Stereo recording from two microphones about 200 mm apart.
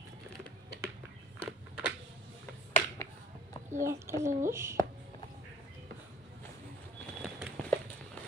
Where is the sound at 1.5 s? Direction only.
5° right (ahead or behind).